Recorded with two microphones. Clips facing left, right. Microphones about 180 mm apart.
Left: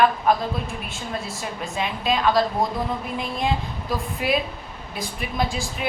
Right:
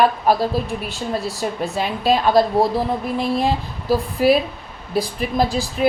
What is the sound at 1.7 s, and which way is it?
Speech, 35° right (ahead or behind).